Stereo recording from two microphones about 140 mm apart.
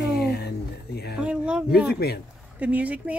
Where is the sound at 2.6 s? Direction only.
10° right (ahead or behind).